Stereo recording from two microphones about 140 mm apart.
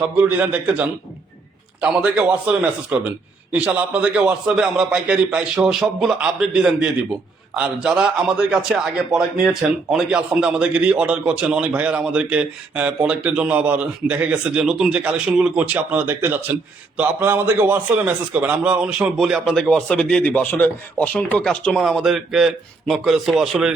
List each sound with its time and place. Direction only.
0.2 s a man's voice: 10° right (ahead or behind)